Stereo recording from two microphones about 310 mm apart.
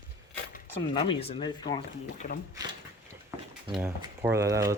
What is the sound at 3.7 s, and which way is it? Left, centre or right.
Speech, centre.